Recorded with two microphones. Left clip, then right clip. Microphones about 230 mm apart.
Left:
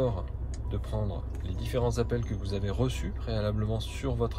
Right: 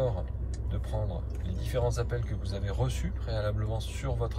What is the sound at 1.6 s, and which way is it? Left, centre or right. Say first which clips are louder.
Speech: left 2 dB; centre.